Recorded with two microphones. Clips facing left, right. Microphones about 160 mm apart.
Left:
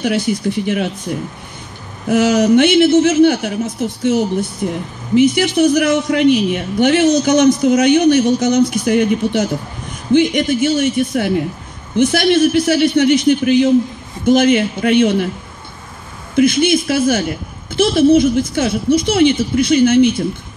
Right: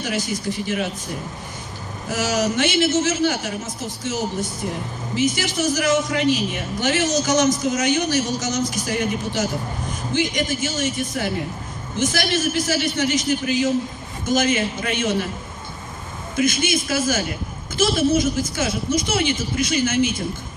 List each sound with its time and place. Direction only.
0.0 s a man's voice: 60° left (ahead or behind)
2.0 s a man's voice: 60° left (ahead or behind)
16.3 s a man's voice: 60° left (ahead or behind)